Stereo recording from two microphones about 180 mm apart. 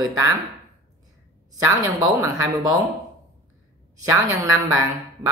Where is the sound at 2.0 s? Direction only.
20° right (ahead or behind).